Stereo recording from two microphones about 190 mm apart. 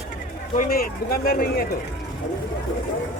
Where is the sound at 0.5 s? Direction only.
50° left (ahead or behind).